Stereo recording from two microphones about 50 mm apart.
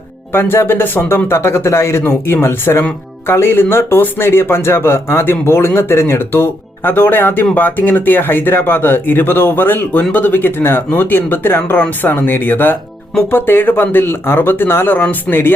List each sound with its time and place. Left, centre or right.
0.3 s a man's voice: left